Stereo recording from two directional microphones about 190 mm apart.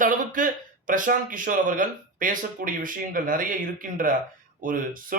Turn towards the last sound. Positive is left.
turn(degrees=-45)  # may be behind; listen again after turning